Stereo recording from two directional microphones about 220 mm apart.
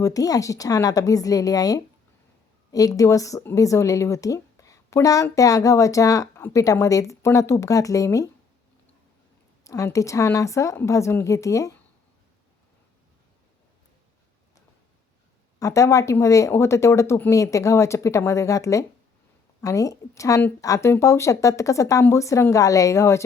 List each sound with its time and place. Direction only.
0.0 s speech: 15° left (ahead or behind)
9.6 s speech: 15° left (ahead or behind)
15.5 s speech: 15° left (ahead or behind)